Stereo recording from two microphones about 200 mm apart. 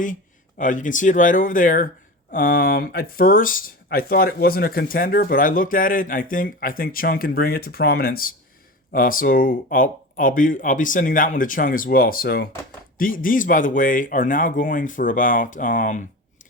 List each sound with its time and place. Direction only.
0.6 s speech: 40° left (ahead or behind)